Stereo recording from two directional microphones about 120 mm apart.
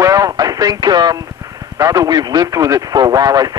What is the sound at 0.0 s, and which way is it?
Radio, 30° right (ahead or behind).